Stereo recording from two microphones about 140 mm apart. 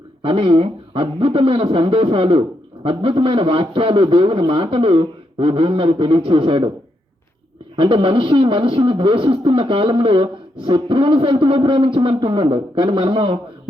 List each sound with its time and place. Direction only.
0.2 s speech: 40° right (ahead or behind)
7.8 s speech: 40° right (ahead or behind)